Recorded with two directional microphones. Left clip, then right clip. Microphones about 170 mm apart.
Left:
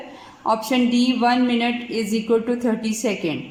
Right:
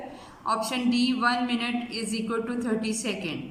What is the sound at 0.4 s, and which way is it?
A woman's voice, 55° left (ahead or behind).